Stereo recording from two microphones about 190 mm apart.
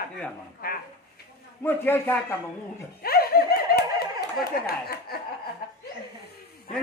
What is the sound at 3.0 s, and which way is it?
Laughter, 55° left (ahead or behind).